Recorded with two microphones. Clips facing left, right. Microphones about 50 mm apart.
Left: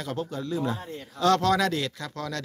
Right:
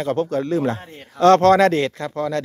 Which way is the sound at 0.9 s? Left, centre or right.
Right.